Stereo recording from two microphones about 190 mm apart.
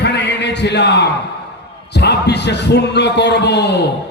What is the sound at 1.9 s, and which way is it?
Speech, 60° left (ahead or behind).